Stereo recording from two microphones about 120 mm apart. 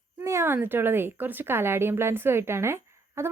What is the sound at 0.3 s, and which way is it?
A woman's voice, 20° right (ahead or behind).